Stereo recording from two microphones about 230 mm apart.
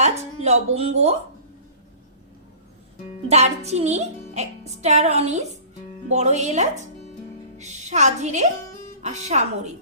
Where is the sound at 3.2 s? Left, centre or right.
Right.